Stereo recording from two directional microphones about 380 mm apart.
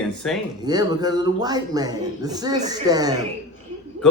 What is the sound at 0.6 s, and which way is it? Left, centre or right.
A man's voice, centre.